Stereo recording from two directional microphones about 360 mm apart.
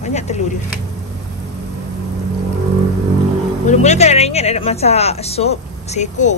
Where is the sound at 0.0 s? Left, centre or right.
Centre.